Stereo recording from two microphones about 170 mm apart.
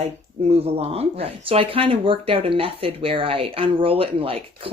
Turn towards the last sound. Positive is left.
turn(degrees=-35)  # may be behind; listen again after turning